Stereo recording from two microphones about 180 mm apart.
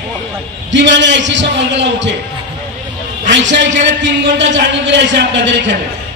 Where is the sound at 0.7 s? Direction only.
90° right.